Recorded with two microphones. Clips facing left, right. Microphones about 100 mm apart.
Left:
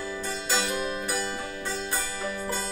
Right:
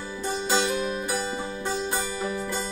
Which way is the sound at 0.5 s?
20° right (ahead or behind).